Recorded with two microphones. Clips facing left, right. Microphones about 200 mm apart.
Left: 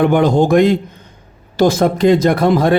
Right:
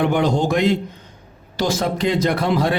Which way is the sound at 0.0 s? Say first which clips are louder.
Left 6 dB; 50° left (ahead or behind).